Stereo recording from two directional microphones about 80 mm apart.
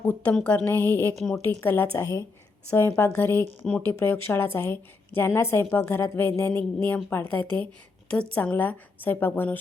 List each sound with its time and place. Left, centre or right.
0.0 s a woman's voice: centre
1.1 s a woman's voice: centre
1.4 s a woman's voice: left